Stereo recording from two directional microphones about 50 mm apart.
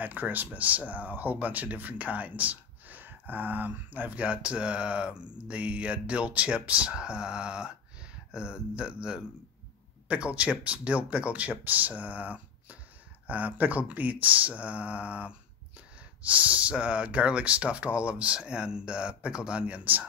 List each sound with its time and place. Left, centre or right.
0.0 s speech: right; by 19.8 s centre
19.8 s speech: right